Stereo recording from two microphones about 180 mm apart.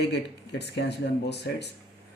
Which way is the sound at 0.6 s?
70° left (ahead or behind).